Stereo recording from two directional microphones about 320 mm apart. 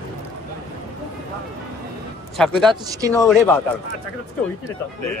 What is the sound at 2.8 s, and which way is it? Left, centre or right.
Speech, centre.